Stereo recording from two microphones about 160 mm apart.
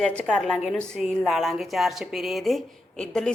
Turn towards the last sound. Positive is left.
turn(degrees=5)  # may be behind; listen again after turning